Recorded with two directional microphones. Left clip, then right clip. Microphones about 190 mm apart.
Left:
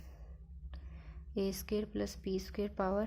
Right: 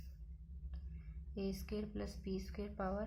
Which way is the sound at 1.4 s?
45° left (ahead or behind).